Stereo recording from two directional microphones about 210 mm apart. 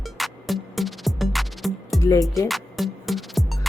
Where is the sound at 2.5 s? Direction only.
Centre (ahead or behind).